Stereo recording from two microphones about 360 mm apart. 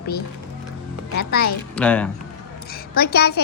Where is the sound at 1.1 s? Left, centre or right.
Left.